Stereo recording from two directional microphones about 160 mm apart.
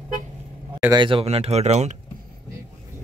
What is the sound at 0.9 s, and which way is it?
Speech, 30° right (ahead or behind).